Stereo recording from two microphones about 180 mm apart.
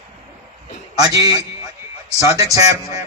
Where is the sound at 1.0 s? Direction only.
20° right (ahead or behind).